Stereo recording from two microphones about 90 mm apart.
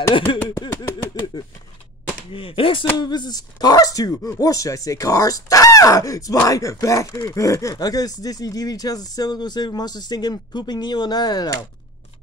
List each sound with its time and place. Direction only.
0.3 s speech: 70° left (ahead or behind)
0.9 s speech: 50° left (ahead or behind)
2.3 s speech: 75° left (ahead or behind); by 11.6 s 45° left (ahead or behind)